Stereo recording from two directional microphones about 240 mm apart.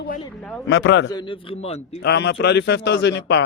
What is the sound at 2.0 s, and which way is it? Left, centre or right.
Speech, left.